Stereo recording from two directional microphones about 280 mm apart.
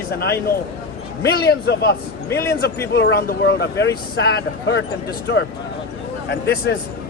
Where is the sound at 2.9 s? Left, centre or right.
Left.